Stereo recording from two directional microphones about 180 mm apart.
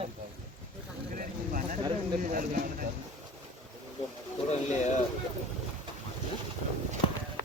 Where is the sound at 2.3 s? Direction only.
50° right (ahead or behind).